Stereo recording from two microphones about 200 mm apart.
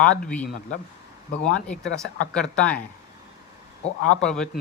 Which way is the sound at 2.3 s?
5° left (ahead or behind).